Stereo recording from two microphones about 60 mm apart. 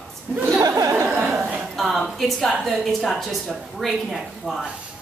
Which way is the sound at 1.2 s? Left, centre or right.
Centre.